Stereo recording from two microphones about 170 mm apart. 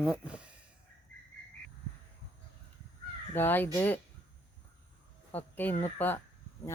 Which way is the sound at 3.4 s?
10° left (ahead or behind).